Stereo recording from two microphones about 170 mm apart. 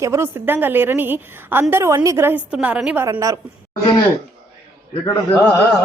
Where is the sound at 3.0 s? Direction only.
20° right (ahead or behind).